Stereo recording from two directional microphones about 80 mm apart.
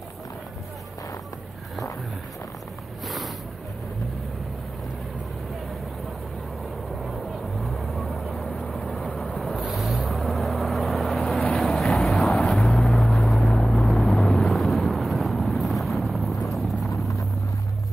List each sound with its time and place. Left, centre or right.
7.0 s vehicle: centre
16.5 s clip-clop: centre
16.9 s vehicle: left